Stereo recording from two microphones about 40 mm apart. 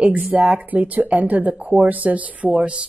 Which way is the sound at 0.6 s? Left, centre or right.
Right.